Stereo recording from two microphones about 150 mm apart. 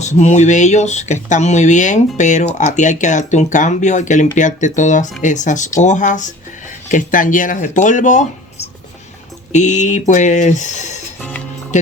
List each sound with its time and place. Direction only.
0.0 s speech: 50° left (ahead or behind)
11.2 s speech: 10° left (ahead or behind)
11.7 s music: 50° left (ahead or behind)